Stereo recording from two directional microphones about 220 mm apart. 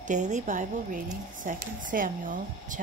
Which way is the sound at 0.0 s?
35° right (ahead or behind).